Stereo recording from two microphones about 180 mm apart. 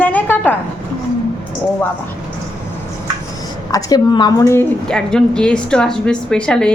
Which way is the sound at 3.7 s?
20° left (ahead or behind).